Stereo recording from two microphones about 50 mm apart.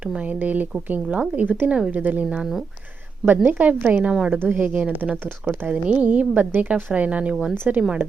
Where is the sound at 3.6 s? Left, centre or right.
Right.